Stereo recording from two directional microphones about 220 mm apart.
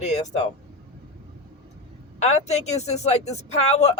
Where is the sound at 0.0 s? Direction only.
30° left (ahead or behind).